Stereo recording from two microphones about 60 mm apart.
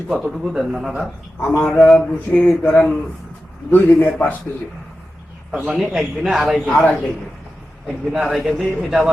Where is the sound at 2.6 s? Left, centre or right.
Centre.